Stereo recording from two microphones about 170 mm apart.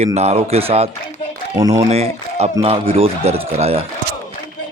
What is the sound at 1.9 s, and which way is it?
Speech, 40° right (ahead or behind).